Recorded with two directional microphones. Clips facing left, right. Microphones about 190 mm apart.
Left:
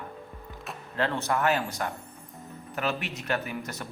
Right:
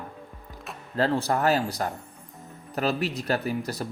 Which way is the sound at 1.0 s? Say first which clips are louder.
Right 3 dB; 35° right (ahead or behind).